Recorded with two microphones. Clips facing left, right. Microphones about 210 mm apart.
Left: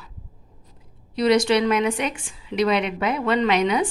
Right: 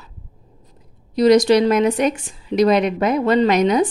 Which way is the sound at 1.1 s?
40° right (ahead or behind).